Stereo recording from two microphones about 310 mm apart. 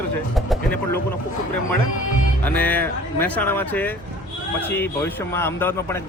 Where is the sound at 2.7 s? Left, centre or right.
Centre.